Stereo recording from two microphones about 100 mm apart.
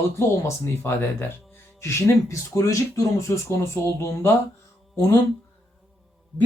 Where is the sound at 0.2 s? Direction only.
25° left (ahead or behind).